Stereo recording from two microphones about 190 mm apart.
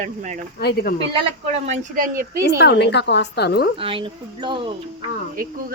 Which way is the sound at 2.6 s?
60° left (ahead or behind).